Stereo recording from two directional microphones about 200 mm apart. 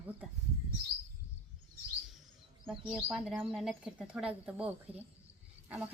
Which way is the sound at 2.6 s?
Centre (ahead or behind).